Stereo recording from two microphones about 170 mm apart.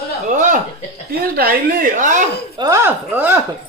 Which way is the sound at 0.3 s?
45° right (ahead or behind).